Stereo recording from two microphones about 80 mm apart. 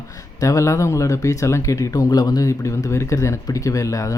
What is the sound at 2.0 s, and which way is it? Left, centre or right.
Speech, left.